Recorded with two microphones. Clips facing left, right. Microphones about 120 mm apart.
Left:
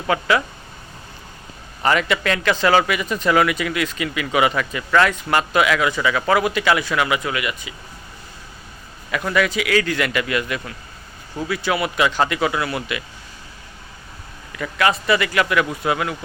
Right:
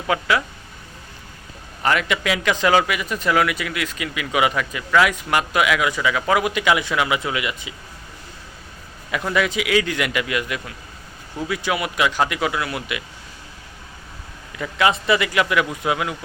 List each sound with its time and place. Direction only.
0.1 s speech: 5° right (ahead or behind)
1.8 s a man's voice: centre (ahead or behind); by 7.7 s 20° right (ahead or behind)
9.1 s a man's voice: 20° right (ahead or behind)
14.5 s a man's voice: 20° right (ahead or behind)